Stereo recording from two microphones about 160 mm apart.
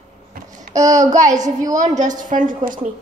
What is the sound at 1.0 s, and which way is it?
A woman's voice, 50° right (ahead or behind).